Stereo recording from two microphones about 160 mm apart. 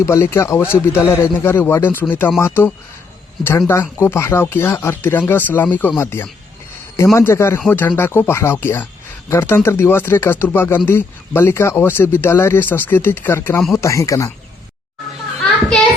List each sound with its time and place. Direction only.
0.0 s speech: 15° left (ahead or behind)